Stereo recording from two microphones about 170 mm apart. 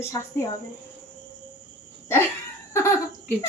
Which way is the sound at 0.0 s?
15° left (ahead or behind).